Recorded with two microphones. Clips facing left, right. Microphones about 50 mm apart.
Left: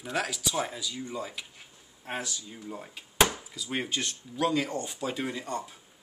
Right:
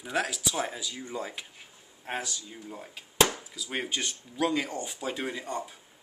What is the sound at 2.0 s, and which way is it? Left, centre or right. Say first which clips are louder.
Speech: right 1 dB; centre.